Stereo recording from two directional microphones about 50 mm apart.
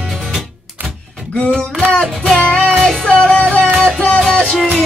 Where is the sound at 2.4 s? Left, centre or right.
Left.